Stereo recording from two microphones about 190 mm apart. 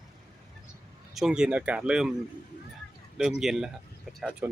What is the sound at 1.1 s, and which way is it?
Speech, 5° right (ahead or behind).